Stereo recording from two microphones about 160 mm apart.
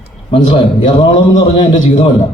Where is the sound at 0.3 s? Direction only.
30° left (ahead or behind).